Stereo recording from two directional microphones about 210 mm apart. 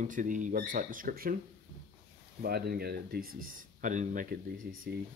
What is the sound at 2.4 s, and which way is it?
Speech, 50° right (ahead or behind).